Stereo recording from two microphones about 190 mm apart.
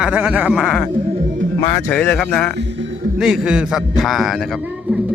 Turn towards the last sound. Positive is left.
turn(degrees=0)  # may be behind; listen again after turning